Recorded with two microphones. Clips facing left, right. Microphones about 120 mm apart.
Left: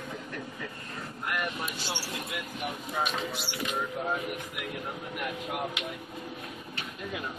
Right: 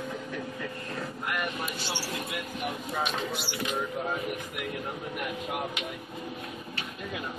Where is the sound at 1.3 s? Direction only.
Centre (ahead or behind).